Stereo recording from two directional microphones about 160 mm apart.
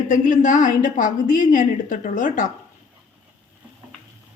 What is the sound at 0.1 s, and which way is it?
A woman's voice, 55° left (ahead or behind).